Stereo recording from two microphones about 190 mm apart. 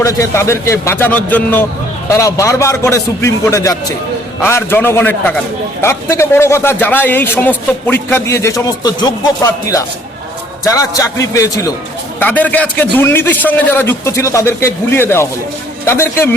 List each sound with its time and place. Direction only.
0.0 s a man's voice: 15° left (ahead or behind)